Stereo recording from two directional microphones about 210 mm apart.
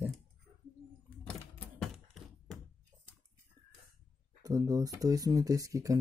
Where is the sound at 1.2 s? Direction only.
5° left (ahead or behind).